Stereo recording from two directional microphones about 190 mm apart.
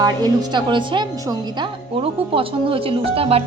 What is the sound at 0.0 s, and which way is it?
Speech, 20° right (ahead or behind).